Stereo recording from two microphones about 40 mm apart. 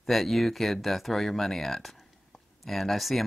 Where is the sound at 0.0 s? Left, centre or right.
Centre.